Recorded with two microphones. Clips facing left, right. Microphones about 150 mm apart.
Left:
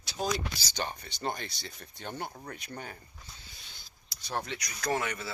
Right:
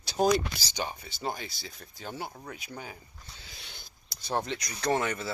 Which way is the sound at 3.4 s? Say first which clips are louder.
Right 5 dB; 85° right.